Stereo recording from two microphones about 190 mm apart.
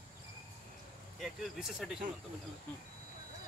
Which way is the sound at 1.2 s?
Centre (ahead or behind).